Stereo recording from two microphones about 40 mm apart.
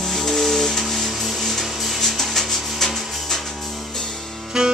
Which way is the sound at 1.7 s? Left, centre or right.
Centre.